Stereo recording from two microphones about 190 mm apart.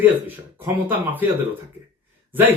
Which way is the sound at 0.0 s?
10° right (ahead or behind).